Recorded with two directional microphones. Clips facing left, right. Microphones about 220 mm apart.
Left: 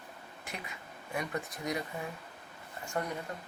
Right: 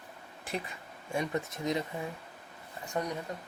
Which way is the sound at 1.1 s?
25° right (ahead or behind).